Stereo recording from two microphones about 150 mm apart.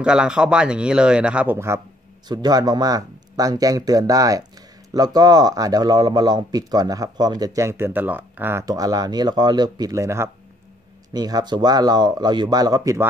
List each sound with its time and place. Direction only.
0.0 s speech: 5° right (ahead or behind)
2.2 s speech: 25° right (ahead or behind)